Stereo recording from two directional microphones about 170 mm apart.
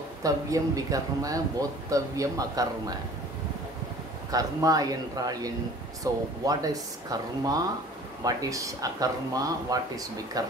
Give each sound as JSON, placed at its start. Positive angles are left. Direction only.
{"t": 0.2, "sound": "speech", "side_deg": -20}
{"t": 4.3, "sound": "speech", "side_deg": -20}